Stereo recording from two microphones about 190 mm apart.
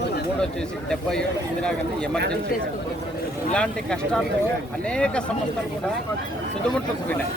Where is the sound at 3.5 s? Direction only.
5° left (ahead or behind).